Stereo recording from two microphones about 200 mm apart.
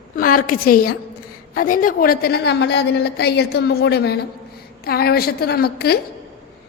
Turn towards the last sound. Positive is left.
turn(degrees=50)  # may be behind; listen again after turning